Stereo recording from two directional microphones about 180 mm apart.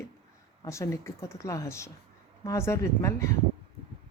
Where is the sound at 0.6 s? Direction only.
15° left (ahead or behind).